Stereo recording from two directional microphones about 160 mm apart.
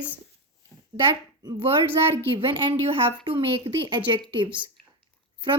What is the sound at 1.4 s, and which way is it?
A woman's voice, 25° right (ahead or behind).